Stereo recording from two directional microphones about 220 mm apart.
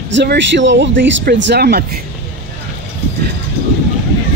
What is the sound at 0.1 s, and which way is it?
Speech, 55° right (ahead or behind).